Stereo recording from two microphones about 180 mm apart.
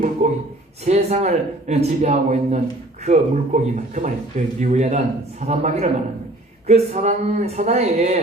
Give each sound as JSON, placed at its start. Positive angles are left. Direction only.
{"t": 0.2, "sound": "a man's voice", "side_deg": -40}